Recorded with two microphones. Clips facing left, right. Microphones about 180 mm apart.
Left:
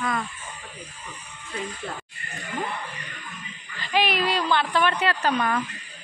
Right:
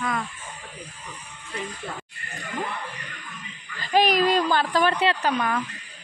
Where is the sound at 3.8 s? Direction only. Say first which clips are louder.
Right 4 dB; 40° right (ahead or behind).